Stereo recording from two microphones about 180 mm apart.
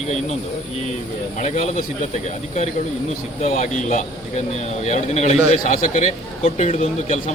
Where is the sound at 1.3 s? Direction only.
40° left (ahead or behind).